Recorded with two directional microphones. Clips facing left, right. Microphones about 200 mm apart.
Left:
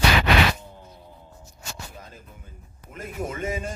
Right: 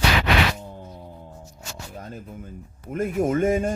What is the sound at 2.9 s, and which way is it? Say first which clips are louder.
Speech: right 10 dB; 50° right (ahead or behind).